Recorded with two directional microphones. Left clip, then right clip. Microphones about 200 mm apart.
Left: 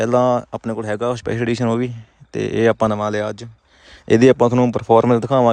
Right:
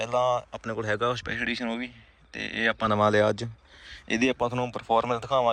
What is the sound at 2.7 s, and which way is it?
Speech, 35° left (ahead or behind).